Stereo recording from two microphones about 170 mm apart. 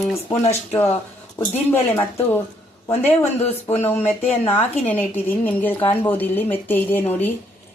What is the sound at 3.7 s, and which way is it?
A woman's voice, 10° left (ahead or behind).